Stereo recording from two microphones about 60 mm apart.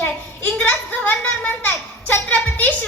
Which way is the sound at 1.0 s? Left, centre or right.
Left.